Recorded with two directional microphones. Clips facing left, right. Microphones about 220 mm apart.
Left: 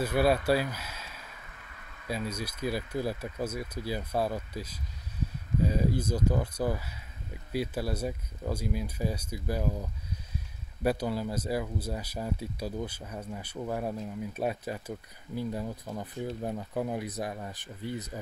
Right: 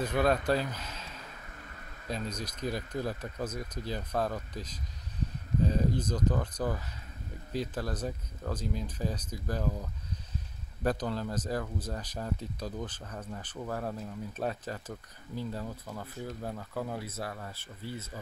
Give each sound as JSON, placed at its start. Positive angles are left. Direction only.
{"t": 0.0, "sound": "speech", "side_deg": 10}